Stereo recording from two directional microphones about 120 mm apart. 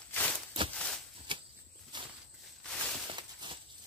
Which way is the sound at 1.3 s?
45° right (ahead or behind).